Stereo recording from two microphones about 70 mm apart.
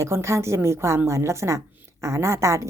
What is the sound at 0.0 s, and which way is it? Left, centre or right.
A woman's voice, right.